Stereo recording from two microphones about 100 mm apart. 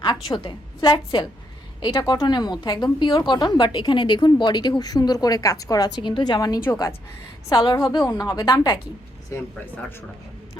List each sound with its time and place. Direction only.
0.0 s a woman's voice: 50° left (ahead or behind)
1.8 s a woman's voice: 40° left (ahead or behind)
6.0 s a woman's voice: 50° left (ahead or behind)